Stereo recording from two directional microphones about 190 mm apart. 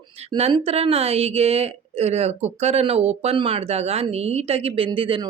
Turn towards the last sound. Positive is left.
turn(degrees=-25)  # may be behind; listen again after turning